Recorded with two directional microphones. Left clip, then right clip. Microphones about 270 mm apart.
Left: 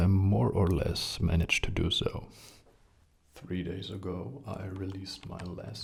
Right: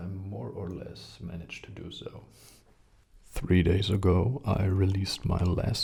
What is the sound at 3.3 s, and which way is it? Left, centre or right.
Speech, right.